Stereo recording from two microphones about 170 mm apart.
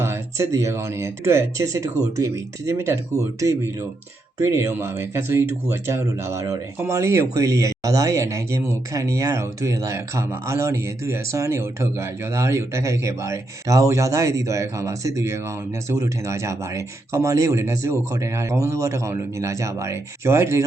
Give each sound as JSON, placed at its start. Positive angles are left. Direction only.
{"t": 0.0, "sound": "speech", "side_deg": -15}